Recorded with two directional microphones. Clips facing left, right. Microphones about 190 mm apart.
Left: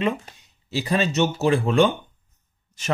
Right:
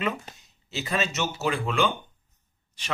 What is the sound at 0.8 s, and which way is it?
Speech, 35° left (ahead or behind).